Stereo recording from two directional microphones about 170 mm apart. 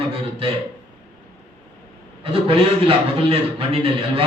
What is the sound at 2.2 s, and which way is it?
A man's voice, 35° right (ahead or behind).